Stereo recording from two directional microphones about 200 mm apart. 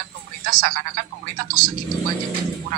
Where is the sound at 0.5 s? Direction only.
45° right (ahead or behind).